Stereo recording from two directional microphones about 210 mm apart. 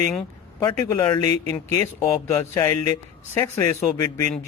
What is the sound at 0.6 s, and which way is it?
A man's voice, 20° left (ahead or behind).